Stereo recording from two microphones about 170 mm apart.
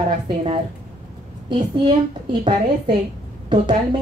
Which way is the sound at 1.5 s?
25° right (ahead or behind).